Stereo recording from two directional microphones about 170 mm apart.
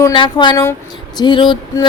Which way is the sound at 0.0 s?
25° left (ahead or behind).